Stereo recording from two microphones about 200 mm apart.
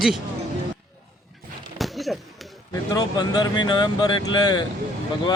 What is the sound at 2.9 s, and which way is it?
Speech, 20° left (ahead or behind).